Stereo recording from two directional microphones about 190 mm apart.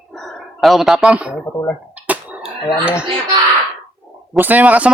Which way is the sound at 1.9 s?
10° right (ahead or behind).